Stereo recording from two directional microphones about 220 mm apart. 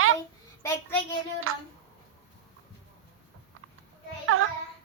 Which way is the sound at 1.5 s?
70° right (ahead or behind).